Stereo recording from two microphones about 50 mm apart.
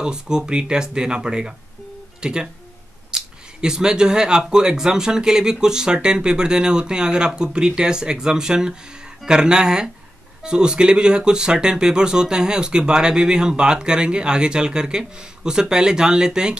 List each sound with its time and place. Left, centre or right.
0.0 s speech: centre